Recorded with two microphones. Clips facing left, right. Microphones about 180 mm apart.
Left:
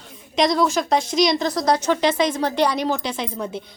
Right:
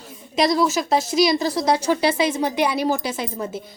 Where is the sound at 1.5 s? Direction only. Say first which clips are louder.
Even; 25° right (ahead or behind).